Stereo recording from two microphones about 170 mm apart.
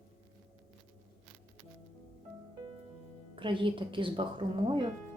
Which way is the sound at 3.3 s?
30° right (ahead or behind).